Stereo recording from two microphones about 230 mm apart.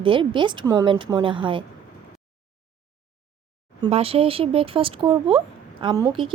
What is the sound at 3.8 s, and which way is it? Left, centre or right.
A woman's voice, right.